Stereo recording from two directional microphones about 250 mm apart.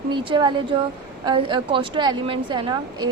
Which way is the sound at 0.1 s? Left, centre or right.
Centre.